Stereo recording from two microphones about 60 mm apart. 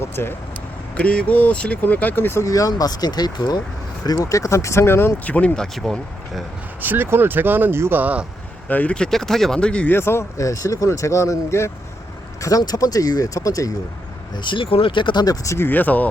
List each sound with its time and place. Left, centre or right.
0.0 s speech: left
0.9 s speech: centre; by 2.4 s left
2.4 s speech: left
5.2 s speech: left
5.8 s speech: centre
6.8 s speech: right
8.6 s speech: left
9.0 s speech: centre
9.8 s speech: left
12.4 s speech: left
15.2 s speech: left
15.5 s speech: left